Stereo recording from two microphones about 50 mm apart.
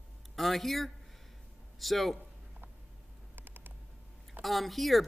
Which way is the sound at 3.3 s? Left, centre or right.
Right.